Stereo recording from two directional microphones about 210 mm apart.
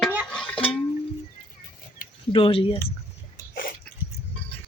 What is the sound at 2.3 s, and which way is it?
Speech, 25° left (ahead or behind).